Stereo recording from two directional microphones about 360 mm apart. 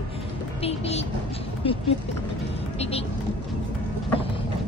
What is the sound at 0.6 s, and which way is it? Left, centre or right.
Music, centre.